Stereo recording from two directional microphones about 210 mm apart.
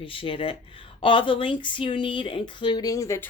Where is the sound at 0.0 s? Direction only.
25° left (ahead or behind).